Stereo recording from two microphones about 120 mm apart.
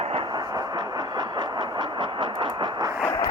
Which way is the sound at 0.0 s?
55° right (ahead or behind).